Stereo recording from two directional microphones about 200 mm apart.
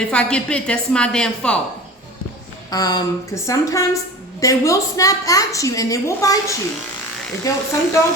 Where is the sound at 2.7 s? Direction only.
20° left (ahead or behind).